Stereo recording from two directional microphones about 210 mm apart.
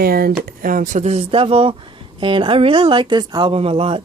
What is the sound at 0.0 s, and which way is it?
A woman's voice, 45° right (ahead or behind).